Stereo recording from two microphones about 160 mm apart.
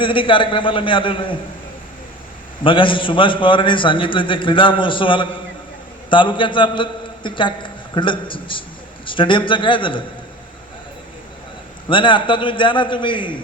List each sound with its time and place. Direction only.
0.0 s a man's voice: 30° left (ahead or behind)
2.6 s a man's voice: 30° left (ahead or behind)
11.9 s a man's voice: 30° left (ahead or behind)